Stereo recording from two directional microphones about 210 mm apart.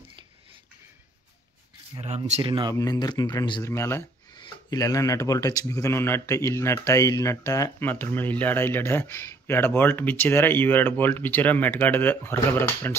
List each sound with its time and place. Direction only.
2.0 s speech: 30° right (ahead or behind)
2.7 s speech: 15° left (ahead or behind)